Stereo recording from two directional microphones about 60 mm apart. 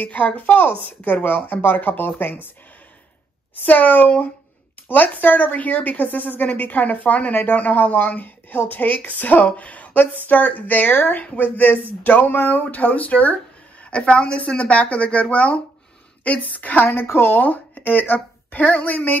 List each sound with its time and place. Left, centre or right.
0.0 s speech: left
3.6 s a woman's voice: left